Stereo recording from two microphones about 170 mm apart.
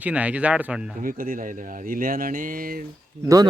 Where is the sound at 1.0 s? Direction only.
55° right (ahead or behind).